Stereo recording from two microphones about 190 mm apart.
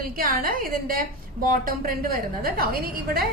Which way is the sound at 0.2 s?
50° right (ahead or behind).